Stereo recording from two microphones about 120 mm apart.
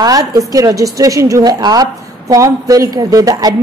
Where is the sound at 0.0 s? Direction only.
30° right (ahead or behind).